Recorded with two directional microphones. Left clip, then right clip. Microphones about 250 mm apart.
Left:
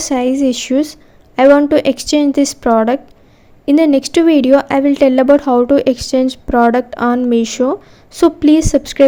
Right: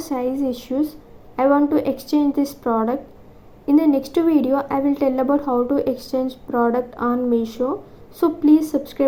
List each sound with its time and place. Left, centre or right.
0.0 s speech: left